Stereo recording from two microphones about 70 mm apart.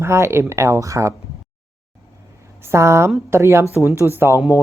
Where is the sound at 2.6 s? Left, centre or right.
Right.